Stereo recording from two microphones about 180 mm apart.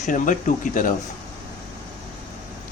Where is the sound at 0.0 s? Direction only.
45° left (ahead or behind).